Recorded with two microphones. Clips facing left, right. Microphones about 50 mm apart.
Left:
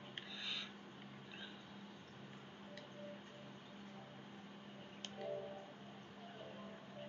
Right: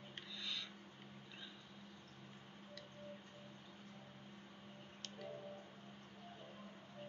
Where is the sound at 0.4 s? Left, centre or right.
Centre.